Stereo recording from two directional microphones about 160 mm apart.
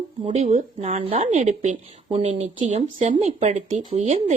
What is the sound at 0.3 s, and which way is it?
Speech, 45° right (ahead or behind).